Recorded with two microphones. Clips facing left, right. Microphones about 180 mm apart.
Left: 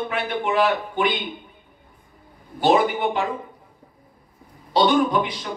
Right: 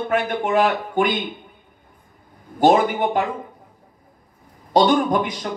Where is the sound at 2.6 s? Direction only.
45° right (ahead or behind).